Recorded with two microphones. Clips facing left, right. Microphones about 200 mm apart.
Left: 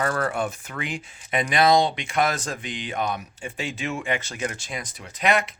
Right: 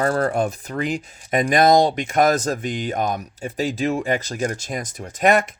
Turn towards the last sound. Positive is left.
turn(degrees=-45)  # may be behind; listen again after turning